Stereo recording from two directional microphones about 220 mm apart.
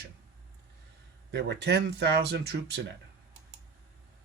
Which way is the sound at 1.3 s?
50° right (ahead or behind).